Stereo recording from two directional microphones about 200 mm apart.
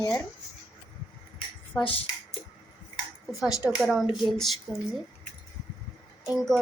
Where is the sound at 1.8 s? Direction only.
25° left (ahead or behind).